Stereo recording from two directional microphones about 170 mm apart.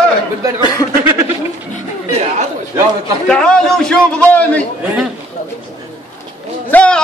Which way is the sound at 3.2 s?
5° left (ahead or behind).